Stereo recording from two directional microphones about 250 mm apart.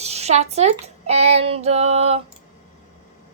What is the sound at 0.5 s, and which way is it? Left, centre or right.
A woman's voice, right.